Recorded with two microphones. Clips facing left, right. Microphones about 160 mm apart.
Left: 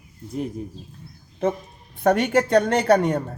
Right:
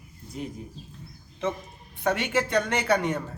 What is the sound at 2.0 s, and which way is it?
A man's voice, 45° left (ahead or behind).